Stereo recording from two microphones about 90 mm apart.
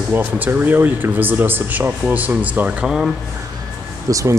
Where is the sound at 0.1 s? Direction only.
25° right (ahead or behind); by 3.1 s 5° right (ahead or behind).